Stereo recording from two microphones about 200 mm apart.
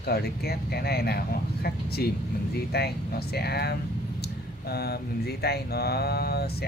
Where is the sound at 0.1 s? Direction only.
50° left (ahead or behind).